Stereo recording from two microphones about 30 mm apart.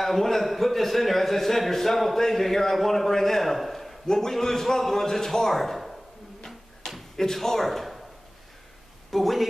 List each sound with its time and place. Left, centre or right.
0.0 s a man's voice: centre
4.1 s a man's voice: centre
7.4 s speech: centre
9.1 s speech: centre